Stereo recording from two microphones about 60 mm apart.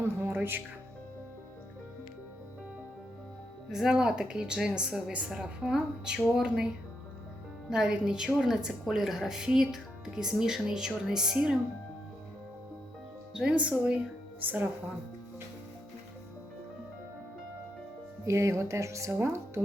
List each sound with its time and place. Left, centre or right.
0.3 s speech: right
3.7 s a woman's voice: centre
7.7 s a woman's voice: centre
13.3 s speech: centre
14.4 s speech: right
18.3 s speech: right